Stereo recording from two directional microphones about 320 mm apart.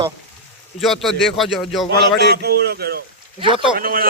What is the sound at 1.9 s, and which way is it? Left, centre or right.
Speech, right.